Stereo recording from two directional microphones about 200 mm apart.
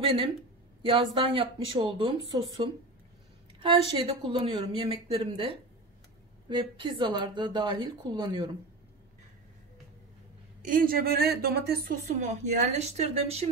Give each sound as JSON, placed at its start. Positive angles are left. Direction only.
{"t": 0.8, "sound": "a woman's voice", "side_deg": -25}
{"t": 6.5, "sound": "a woman's voice", "side_deg": -25}
{"t": 10.6, "sound": "a woman's voice", "side_deg": -45}